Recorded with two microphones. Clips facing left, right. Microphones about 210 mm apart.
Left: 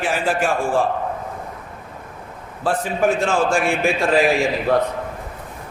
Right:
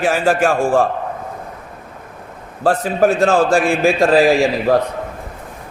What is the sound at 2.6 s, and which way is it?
A man's voice, 40° right (ahead or behind).